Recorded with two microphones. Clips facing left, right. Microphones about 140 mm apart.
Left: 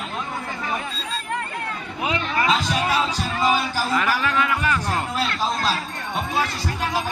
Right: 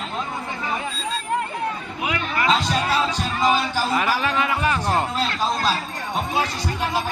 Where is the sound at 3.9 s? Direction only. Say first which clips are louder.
Left 1 dB; 15° right (ahead or behind).